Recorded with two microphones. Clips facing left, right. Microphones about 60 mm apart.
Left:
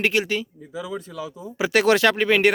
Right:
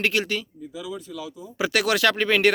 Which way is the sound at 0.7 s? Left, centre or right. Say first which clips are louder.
Left 3 dB; left.